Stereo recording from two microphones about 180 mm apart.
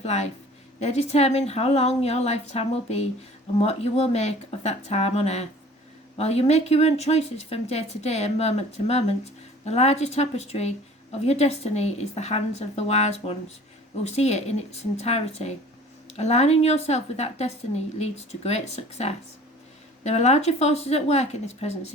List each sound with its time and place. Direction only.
0.0 s speech: 40° left (ahead or behind)